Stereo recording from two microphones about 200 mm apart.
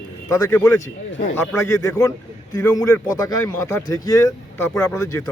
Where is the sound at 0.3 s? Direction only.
10° left (ahead or behind).